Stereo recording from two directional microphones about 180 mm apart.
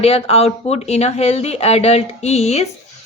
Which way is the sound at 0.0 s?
35° left (ahead or behind).